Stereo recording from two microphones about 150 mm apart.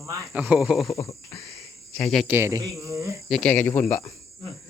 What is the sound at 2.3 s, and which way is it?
Speech, 15° right (ahead or behind).